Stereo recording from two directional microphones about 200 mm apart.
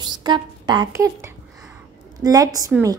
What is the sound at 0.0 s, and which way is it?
A woman's voice, 20° right (ahead or behind).